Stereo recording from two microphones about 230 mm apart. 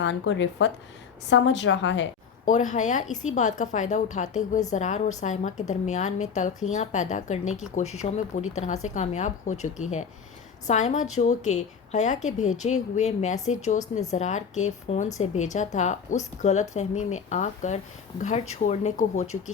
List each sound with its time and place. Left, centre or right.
0.0 s a woman's voice: left
2.4 s speech: left